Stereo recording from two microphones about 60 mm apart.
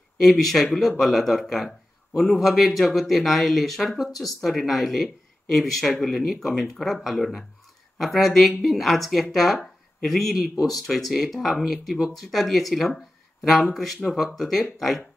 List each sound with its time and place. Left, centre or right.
0.2 s speech: centre